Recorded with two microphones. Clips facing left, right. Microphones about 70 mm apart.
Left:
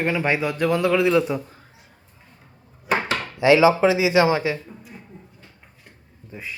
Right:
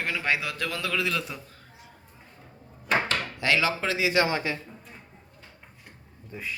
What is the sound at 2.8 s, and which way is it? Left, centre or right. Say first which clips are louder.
Drawer open or close: left 3 dB; centre.